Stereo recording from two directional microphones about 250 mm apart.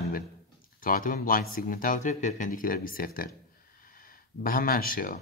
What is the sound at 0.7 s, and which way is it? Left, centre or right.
Speech, left.